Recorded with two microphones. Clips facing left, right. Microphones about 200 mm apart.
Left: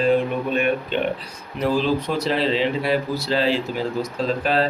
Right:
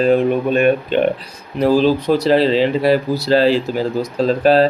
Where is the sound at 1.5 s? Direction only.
35° right (ahead or behind).